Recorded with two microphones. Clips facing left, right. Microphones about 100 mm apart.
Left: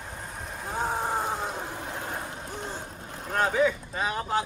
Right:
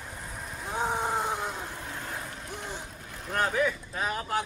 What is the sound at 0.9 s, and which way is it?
Boat, 10° left (ahead or behind).